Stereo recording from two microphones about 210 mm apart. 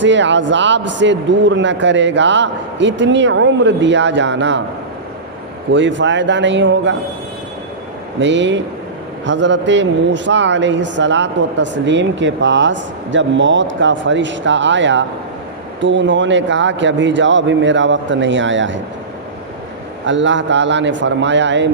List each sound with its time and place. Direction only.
0.0 s speech: 60° right (ahead or behind)
5.7 s speech: 60° right (ahead or behind)
8.2 s speech: 60° right (ahead or behind)
20.1 s speech: 60° right (ahead or behind)